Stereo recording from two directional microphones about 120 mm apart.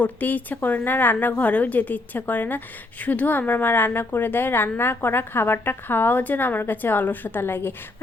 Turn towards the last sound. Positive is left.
turn(degrees=20)  # may be behind; listen again after turning